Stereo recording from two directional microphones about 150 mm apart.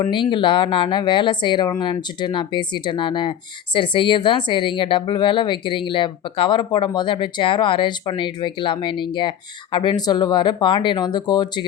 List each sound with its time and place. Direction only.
0.0 s speech: 35° left (ahead or behind)